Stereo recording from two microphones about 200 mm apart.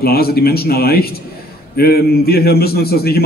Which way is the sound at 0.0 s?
50° left (ahead or behind).